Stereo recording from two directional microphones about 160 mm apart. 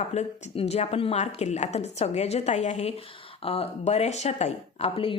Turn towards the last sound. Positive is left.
turn(degrees=35)  # may be behind; listen again after turning